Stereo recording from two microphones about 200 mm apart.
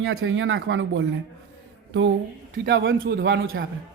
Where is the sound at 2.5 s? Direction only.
65° right (ahead or behind).